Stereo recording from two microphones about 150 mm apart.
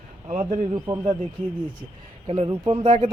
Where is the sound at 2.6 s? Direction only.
35° right (ahead or behind).